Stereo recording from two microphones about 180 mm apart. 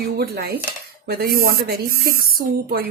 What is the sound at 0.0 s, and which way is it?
Speech, 60° right (ahead or behind).